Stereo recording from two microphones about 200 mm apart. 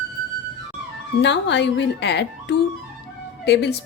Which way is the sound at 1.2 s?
60° left (ahead or behind).